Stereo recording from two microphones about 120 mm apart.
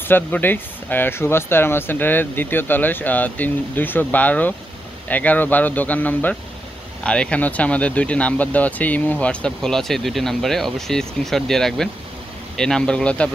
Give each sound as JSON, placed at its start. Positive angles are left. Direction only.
{"t": 0.1, "sound": "speech", "side_deg": 15}